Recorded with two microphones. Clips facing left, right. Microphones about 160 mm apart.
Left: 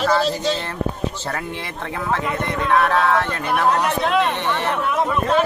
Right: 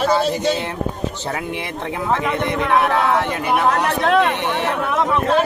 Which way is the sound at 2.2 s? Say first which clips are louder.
Right 3 dB; 75° right (ahead or behind).